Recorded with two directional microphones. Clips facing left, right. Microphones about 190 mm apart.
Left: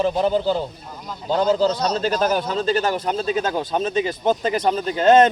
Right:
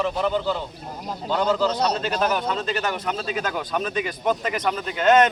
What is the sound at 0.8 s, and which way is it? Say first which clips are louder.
Speech: right 2 dB; 35° right (ahead or behind).